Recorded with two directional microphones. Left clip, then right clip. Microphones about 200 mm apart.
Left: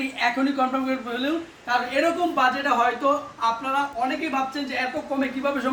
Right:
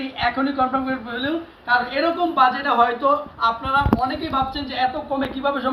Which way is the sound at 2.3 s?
30° left (ahead or behind).